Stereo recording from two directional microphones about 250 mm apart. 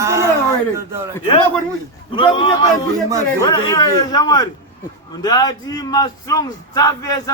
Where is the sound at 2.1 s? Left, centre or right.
Left.